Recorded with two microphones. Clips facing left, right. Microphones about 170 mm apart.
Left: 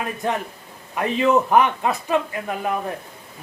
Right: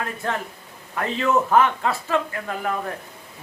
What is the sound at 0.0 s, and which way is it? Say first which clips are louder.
A man's voice: left 3 dB; 15° left (ahead or behind).